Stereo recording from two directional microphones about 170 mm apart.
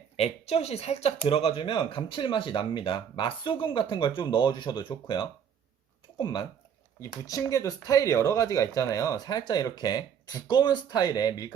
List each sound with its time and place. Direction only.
0.2 s speech: 40° left (ahead or behind)